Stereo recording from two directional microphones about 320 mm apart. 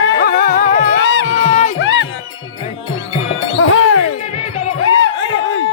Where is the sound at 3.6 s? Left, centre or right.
Left.